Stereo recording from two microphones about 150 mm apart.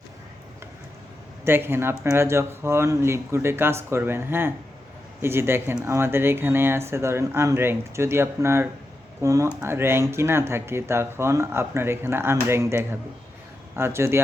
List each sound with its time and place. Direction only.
1.5 s speech: 15° right (ahead or behind)